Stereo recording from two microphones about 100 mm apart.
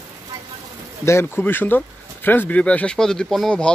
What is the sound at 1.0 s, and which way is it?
Speech, 25° left (ahead or behind).